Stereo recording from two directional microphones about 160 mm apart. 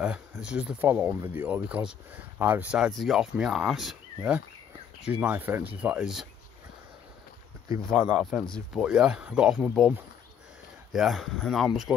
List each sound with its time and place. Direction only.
0.0 s speech: 5° right (ahead or behind)
5.0 s speech: 10° right (ahead or behind)
8.2 s speech: centre (ahead or behind)